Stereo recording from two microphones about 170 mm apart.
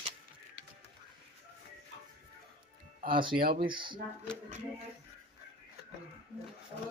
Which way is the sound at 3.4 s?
60° right (ahead or behind).